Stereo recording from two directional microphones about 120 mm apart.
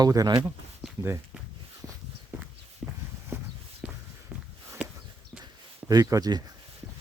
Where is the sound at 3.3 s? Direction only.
20° right (ahead or behind).